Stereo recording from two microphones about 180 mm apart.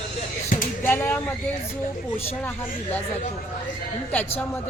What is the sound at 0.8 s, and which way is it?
Speech, 10° left (ahead or behind).